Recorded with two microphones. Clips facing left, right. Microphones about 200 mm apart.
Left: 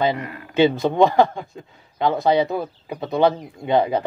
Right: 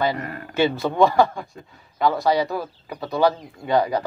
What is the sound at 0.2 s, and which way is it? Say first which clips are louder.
Speech: right 1 dB; 45° right (ahead or behind).